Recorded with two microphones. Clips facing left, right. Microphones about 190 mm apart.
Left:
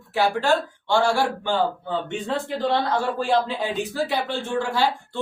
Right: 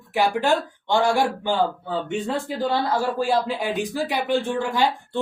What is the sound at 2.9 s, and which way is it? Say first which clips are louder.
Speech: even; 10° right (ahead or behind).